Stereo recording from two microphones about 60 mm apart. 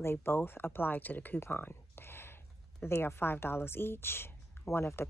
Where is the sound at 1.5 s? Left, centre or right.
Left.